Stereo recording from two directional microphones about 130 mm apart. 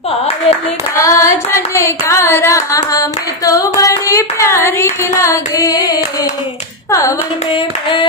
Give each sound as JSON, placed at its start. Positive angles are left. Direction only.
{"t": 1.0, "sound": "carnatic music", "side_deg": 25}
{"t": 6.9, "sound": "hands", "side_deg": 20}
{"t": 7.5, "sound": "clapping", "side_deg": 40}